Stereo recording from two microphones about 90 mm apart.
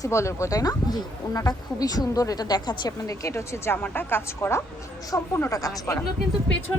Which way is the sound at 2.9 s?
35° left (ahead or behind).